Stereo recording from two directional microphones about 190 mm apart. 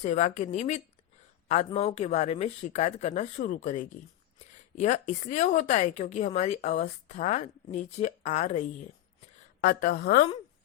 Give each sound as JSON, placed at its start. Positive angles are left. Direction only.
{"t": 0.0, "sound": "a woman's voice", "side_deg": 40}
{"t": 9.6, "sound": "a woman's voice", "side_deg": 50}